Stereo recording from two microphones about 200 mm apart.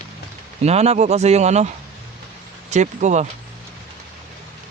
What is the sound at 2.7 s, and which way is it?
Speech, 35° right (ahead or behind).